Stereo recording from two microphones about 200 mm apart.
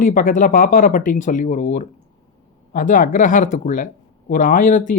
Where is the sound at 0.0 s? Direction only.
40° left (ahead or behind).